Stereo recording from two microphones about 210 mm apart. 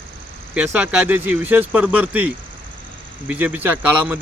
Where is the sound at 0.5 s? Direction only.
5° right (ahead or behind).